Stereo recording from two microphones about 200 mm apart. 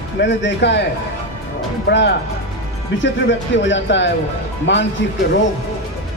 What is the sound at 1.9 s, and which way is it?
Speech, 60° left (ahead or behind).